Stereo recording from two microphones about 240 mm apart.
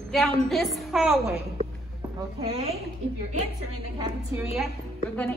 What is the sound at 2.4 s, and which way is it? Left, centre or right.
Speech, right.